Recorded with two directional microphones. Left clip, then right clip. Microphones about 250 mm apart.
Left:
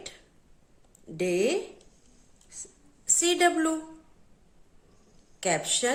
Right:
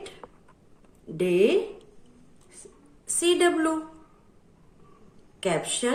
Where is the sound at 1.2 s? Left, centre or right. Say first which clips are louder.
Right 4 dB; left.